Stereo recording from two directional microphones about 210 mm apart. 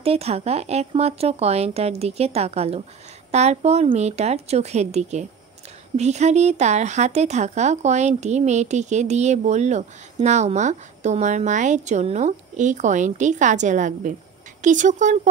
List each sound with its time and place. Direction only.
0.0 s speech: 30° right (ahead or behind)